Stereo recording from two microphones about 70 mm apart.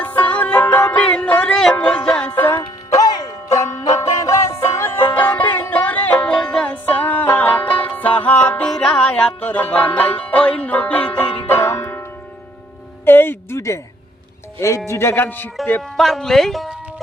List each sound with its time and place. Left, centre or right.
0.0 s music: left
2.2 s music: left
2.6 s music: left
3.1 s music: left
3.5 s music: left
5.1 s music: left
6.8 s music: left
11.4 s banjo: left
13.1 s music: left
13.6 s a sound: left
14.8 s a man's voice: left
15.8 s speech: centre